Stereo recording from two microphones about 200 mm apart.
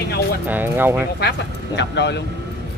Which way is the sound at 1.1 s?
60° left (ahead or behind).